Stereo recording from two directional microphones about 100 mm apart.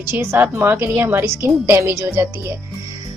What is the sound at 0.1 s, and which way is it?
A woman's voice, 25° right (ahead or behind).